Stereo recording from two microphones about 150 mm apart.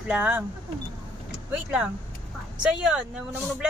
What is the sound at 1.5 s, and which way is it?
Speech, 5° right (ahead or behind).